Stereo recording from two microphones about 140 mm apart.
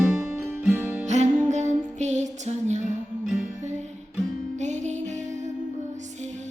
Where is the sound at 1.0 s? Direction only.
55° right (ahead or behind).